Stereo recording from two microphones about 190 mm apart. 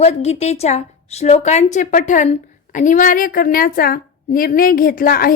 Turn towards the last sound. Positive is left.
turn(degrees=50)  # may be behind; listen again after turning